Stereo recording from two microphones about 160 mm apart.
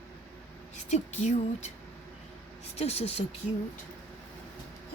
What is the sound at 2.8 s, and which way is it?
Speech, 40° left (ahead or behind).